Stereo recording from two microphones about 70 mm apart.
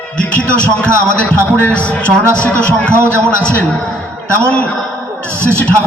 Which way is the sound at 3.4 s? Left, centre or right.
Centre.